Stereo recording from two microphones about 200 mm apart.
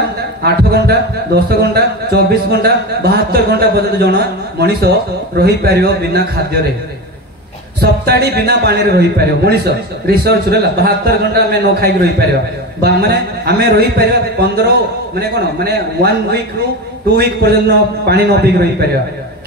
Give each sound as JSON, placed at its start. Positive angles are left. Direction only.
{"t": 0.4, "sound": "speech", "side_deg": -50}
{"t": 7.8, "sound": "speech", "side_deg": -50}
{"t": 15.1, "sound": "speech", "side_deg": -50}